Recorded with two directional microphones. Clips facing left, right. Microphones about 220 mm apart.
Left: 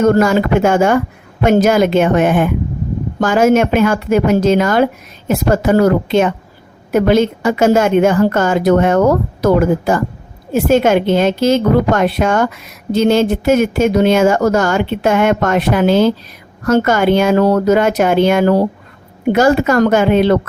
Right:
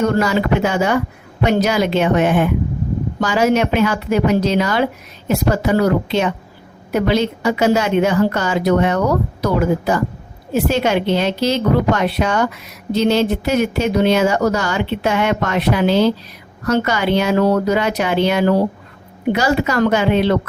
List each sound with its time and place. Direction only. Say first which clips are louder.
0.1 s a woman's voice: left 5 dB; 50° left (ahead or behind)